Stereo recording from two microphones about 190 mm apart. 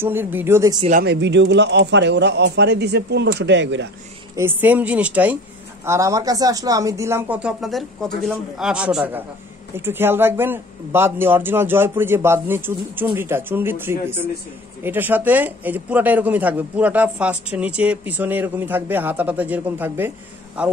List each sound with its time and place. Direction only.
0.0 s speech: 10° right (ahead or behind)
1.0 s a man's voice: 65° right (ahead or behind)
4.4 s a man's voice: 10° right (ahead or behind)